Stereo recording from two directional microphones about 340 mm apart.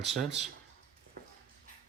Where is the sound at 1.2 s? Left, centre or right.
Right.